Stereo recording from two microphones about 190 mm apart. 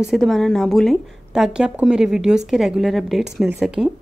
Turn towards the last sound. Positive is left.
turn(degrees=-5)  # may be behind; listen again after turning